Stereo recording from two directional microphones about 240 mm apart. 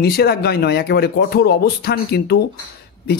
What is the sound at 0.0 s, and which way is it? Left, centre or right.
Speech, left.